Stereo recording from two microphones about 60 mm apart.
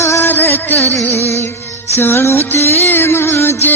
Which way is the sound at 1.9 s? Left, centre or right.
Left.